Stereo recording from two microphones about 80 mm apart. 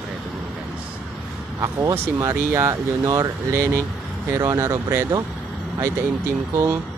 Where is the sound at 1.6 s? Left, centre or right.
Right.